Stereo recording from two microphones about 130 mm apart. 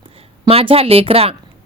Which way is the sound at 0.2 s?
50° right (ahead or behind).